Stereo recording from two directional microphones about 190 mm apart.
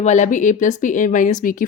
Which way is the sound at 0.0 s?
40° left (ahead or behind).